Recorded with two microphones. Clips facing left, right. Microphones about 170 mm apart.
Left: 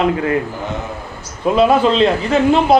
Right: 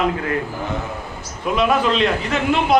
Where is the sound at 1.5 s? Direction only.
30° left (ahead or behind).